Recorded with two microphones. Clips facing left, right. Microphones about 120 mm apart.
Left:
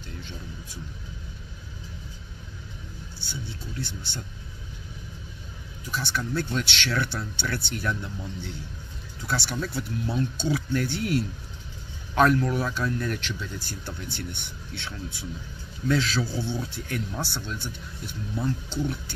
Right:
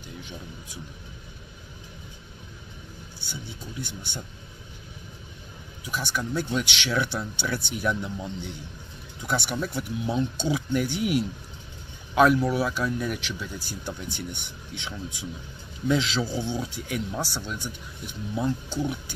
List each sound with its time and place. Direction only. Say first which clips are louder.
3.3 s speech: left 1 dB; 15° right (ahead or behind)
5.9 s speech: even; 15° right (ahead or behind)